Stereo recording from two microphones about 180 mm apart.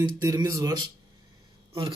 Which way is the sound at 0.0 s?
20° right (ahead or behind).